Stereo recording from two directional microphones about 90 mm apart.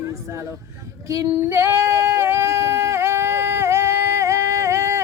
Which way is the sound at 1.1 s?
35° right (ahead or behind).